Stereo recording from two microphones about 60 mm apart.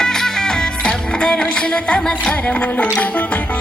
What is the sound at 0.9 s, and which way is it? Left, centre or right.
Music, centre.